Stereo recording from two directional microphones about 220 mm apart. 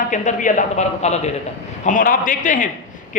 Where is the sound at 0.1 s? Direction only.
35° left (ahead or behind).